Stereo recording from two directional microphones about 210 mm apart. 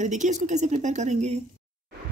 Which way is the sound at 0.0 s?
35° right (ahead or behind).